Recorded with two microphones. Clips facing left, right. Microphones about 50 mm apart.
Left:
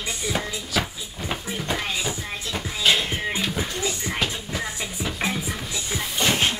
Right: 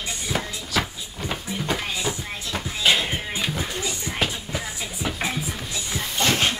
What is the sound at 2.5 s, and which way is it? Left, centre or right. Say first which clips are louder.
Music: even; centre.